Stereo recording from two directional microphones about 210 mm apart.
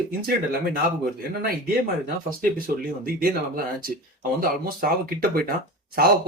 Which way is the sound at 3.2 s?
45° right (ahead or behind).